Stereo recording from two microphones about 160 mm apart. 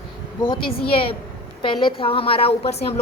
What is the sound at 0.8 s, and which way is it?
A woman's voice, 35° left (ahead or behind).